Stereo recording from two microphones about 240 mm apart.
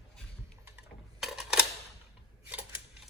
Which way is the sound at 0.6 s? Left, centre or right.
Centre.